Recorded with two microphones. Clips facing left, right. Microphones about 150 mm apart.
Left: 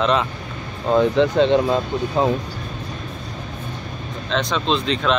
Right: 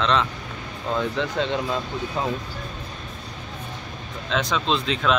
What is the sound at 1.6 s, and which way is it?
Speech, 40° left (ahead or behind).